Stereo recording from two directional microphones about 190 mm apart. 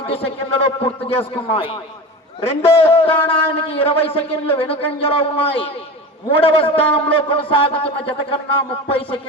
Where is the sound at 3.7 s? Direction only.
30° left (ahead or behind).